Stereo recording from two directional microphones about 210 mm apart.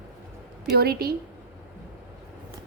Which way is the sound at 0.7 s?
50° right (ahead or behind).